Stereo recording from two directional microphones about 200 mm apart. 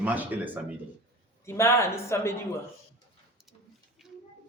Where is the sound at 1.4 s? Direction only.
15° left (ahead or behind).